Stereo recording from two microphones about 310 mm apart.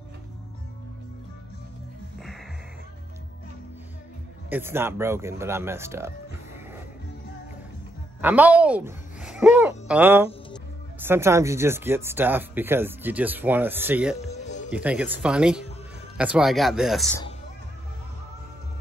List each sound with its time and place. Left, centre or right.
4.5 s speech: centre
8.2 s speech: centre
14.3 s music: left
14.7 s speech: centre